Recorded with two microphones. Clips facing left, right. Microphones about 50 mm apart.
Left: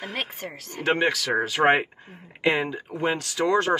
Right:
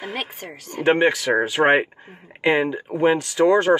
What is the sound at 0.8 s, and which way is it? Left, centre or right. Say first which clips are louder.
Speech: right 5 dB; right.